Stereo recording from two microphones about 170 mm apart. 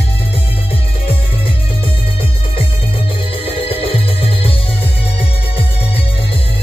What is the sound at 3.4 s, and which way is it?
Music, 35° left (ahead or behind).